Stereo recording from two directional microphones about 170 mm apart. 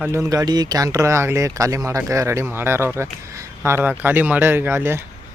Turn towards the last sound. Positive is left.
turn(degrees=-15)  # may be behind; listen again after turning